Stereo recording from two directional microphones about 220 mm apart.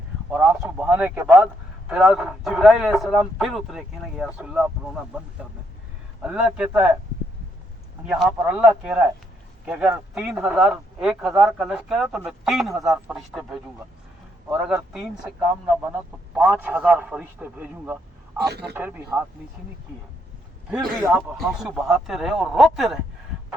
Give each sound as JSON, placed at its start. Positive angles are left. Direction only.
{"t": 0.3, "sound": "a man's voice", "side_deg": -5}
{"t": 6.2, "sound": "a man's voice", "side_deg": -5}
{"t": 8.0, "sound": "a man's voice", "side_deg": 0}
{"t": 18.3, "sound": "a man's voice", "side_deg": -50}
{"t": 18.7, "sound": "speech", "side_deg": -10}
{"t": 20.7, "sound": "a man's voice", "side_deg": -5}